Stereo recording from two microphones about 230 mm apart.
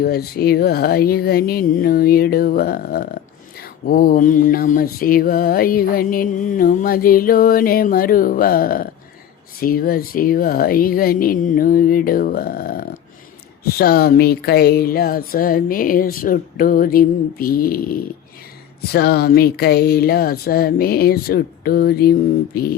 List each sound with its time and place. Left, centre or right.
0.0 s mantra: left
18.9 s a sound: left
22.5 s mantra: left